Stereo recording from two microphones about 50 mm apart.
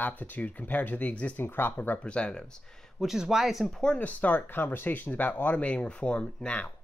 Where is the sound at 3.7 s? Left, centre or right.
Centre.